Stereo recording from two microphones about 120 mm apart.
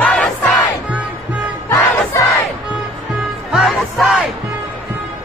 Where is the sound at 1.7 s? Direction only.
20° left (ahead or behind).